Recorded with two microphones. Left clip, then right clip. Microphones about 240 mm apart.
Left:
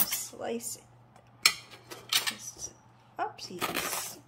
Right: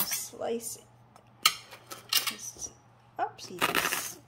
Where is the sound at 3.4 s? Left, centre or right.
Centre.